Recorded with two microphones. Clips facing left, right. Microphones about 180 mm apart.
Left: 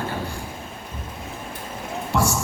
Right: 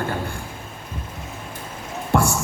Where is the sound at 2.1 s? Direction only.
55° right (ahead or behind).